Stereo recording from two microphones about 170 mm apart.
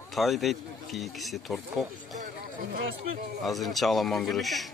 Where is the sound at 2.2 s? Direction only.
55° right (ahead or behind).